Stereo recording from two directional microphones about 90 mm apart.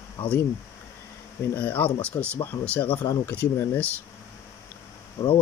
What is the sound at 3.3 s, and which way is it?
Speech, 15° left (ahead or behind).